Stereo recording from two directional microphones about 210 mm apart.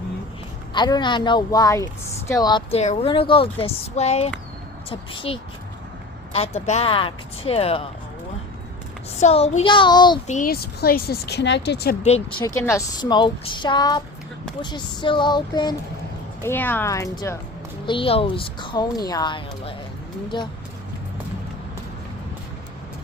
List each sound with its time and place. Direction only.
0.7 s a woman's voice: 20° left (ahead or behind)
9.2 s a woman's voice: 30° left (ahead or behind)
10.2 s speech: 40° left (ahead or behind)
12.0 s a woman's voice: 30° left (ahead or behind)
12.5 s a woman's voice: 15° left (ahead or behind)
16.4 s speech: 10° left (ahead or behind)
17.8 s a woman's voice: 25° left (ahead or behind)